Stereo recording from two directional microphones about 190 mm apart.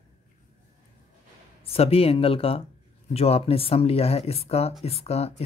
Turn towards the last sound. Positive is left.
turn(degrees=35)  # may be behind; listen again after turning